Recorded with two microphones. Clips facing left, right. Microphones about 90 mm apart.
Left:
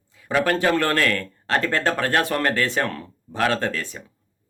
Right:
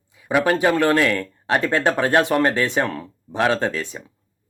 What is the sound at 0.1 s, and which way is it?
Speech, 15° right (ahead or behind).